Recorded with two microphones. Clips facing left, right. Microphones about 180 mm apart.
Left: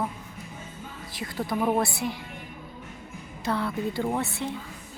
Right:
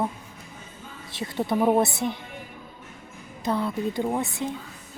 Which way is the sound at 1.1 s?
25° right (ahead or behind).